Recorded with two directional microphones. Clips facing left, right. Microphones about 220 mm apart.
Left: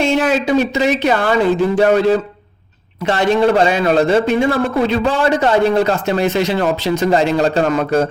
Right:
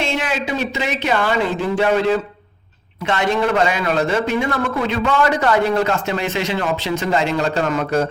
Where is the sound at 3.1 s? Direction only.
35° left (ahead or behind).